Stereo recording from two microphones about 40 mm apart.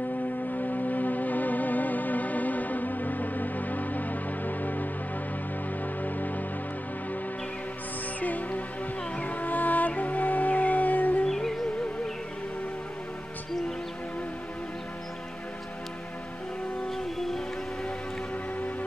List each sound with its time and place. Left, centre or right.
0.6 s music: left
6.0 s music: left
8.2 s music: left
11.2 s music: centre
16.9 s a sound: centre